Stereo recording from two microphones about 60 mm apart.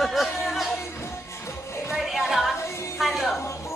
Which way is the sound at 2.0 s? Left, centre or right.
Centre.